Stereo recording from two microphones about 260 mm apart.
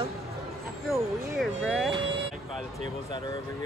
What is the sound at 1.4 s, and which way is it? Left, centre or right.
Speech, centre.